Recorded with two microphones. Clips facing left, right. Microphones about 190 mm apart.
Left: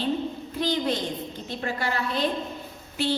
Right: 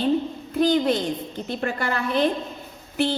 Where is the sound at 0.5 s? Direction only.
50° right (ahead or behind).